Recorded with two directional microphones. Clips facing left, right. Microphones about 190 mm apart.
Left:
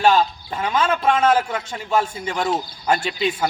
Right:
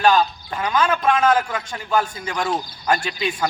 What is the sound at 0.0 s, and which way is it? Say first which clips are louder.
A man's voice: even; 25° left (ahead or behind).